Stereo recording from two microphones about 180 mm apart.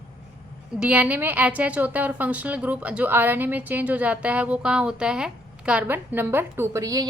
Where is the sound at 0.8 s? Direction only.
10° right (ahead or behind).